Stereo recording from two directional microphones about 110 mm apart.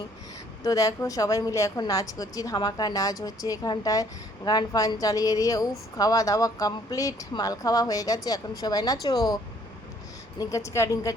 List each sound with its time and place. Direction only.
0.6 s speech: 30° left (ahead or behind)
10.4 s speech: 30° left (ahead or behind)